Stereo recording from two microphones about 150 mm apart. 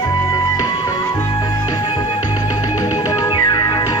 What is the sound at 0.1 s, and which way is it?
Music, 25° left (ahead or behind).